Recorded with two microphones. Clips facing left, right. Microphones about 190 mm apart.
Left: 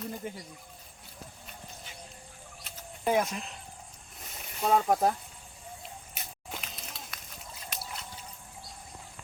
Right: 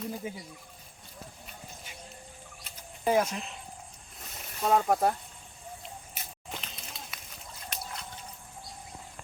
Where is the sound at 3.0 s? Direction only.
Centre (ahead or behind).